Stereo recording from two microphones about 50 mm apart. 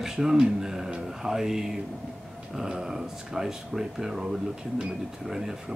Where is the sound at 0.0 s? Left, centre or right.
Centre.